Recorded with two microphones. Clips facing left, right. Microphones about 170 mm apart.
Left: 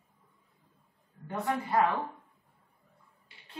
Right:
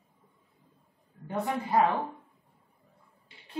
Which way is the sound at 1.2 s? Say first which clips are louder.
Right 1 dB; 15° right (ahead or behind).